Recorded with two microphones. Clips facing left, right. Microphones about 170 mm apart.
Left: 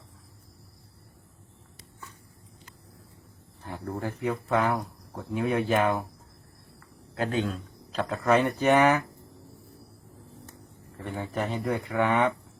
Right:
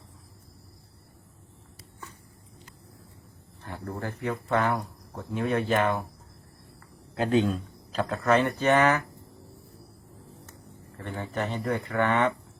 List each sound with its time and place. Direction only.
3.7 s speech: 10° left (ahead or behind)
7.2 s a man's voice: 20° right (ahead or behind)
7.9 s speech: 5° left (ahead or behind)
11.0 s speech: 10° left (ahead or behind)